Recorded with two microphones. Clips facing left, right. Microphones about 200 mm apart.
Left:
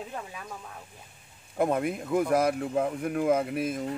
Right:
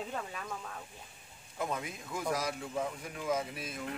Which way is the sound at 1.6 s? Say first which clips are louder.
Left 11 dB; 55° left (ahead or behind).